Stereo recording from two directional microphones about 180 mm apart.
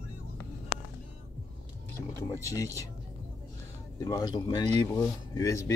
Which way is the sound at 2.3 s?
15° left (ahead or behind).